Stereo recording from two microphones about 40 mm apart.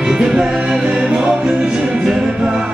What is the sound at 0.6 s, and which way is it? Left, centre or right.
Music, right.